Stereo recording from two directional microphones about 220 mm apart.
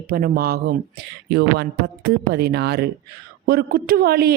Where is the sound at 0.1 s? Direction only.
40° right (ahead or behind).